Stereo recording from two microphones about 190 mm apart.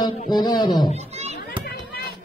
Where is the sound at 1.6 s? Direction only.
55° left (ahead or behind).